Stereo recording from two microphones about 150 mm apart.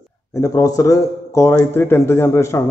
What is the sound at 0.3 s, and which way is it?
A man's voice, 20° left (ahead or behind).